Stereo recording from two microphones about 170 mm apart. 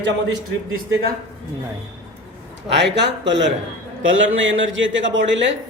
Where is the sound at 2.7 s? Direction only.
90° right.